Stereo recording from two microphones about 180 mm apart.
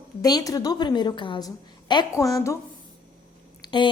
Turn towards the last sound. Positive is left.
turn(degrees=25)  # may be behind; listen again after turning